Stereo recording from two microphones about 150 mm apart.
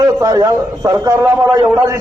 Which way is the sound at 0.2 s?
25° right (ahead or behind).